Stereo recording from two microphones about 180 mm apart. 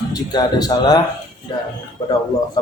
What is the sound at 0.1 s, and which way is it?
Speech, 20° left (ahead or behind).